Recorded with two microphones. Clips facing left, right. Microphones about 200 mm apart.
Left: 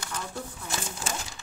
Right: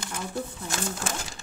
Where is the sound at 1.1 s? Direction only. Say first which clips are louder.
Right 1 dB; 55° right (ahead or behind).